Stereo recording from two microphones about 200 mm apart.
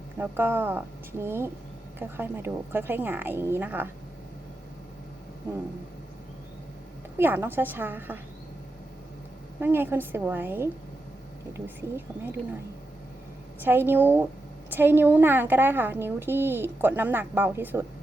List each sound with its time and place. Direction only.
0.2 s a woman's voice: 10° right (ahead or behind)
7.2 s a woman's voice: 10° right (ahead or behind)
9.6 s a woman's voice: 10° right (ahead or behind)
13.7 s a woman's voice: 10° right (ahead or behind)